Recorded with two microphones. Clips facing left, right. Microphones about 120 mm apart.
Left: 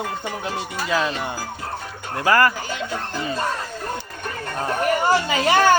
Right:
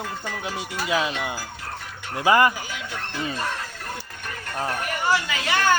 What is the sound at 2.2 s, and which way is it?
Speech, 20° right (ahead or behind).